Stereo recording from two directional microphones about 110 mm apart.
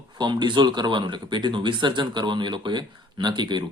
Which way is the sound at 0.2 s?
45° right (ahead or behind).